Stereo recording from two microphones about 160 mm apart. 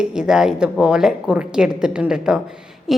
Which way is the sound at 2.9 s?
Centre (ahead or behind).